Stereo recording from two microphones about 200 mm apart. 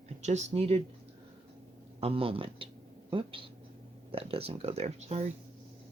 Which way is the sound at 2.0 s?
30° right (ahead or behind).